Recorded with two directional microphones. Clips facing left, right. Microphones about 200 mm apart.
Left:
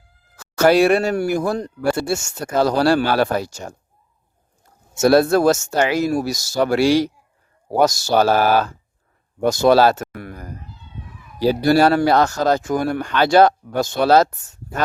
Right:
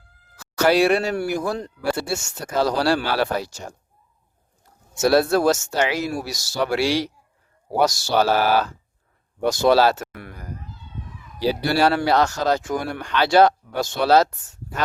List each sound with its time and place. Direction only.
0.3 s speech: 50° left (ahead or behind)
4.9 s speech: 50° left (ahead or behind)